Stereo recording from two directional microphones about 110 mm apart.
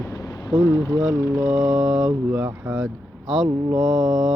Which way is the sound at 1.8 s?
5° right (ahead or behind).